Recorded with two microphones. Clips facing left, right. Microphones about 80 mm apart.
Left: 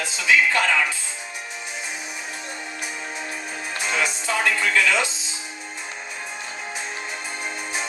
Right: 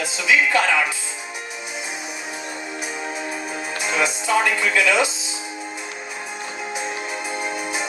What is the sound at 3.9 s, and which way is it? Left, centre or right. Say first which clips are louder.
Speech: right 5 dB; centre.